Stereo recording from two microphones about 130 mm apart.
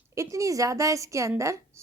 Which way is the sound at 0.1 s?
25° right (ahead or behind).